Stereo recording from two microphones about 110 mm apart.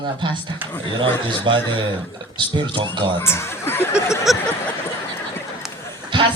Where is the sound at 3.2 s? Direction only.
25° left (ahead or behind).